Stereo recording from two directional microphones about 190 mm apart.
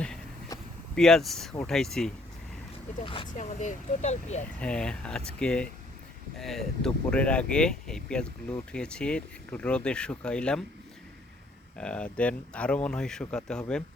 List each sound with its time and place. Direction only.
0.9 s speech: 5° left (ahead or behind)
3.0 s speech: 30° left (ahead or behind)
4.6 s speech: 5° left (ahead or behind)
11.8 s speech: 5° left (ahead or behind)